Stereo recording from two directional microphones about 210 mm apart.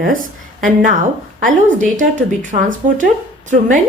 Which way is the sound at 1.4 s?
40° right (ahead or behind).